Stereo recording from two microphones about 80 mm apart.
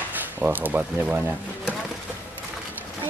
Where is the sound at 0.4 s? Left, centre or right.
Right.